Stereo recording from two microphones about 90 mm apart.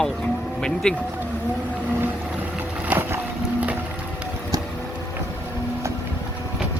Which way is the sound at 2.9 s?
20° right (ahead or behind).